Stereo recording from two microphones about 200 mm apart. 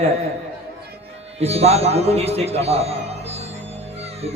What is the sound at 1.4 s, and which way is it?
Speech, 30° right (ahead or behind).